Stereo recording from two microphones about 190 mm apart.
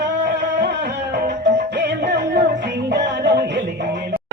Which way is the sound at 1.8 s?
60° right (ahead or behind).